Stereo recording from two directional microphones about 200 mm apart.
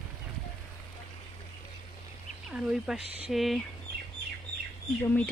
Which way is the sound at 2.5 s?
Centre (ahead or behind).